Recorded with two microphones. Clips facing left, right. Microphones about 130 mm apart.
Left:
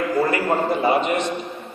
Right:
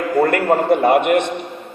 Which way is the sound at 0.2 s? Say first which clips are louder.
Right 6 dB; 60° right (ahead or behind).